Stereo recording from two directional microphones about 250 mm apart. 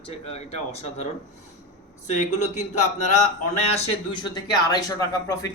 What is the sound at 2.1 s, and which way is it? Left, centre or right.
Speech, left.